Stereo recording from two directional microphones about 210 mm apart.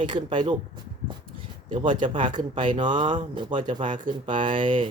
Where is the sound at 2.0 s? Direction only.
20° right (ahead or behind).